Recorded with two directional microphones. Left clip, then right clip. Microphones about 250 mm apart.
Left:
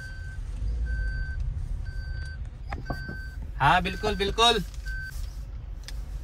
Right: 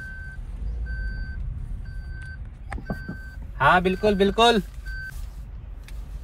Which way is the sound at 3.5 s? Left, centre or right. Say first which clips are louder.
Right 4 dB; centre.